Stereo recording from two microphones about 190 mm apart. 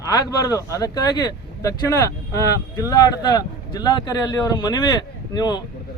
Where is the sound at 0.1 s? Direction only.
20° left (ahead or behind).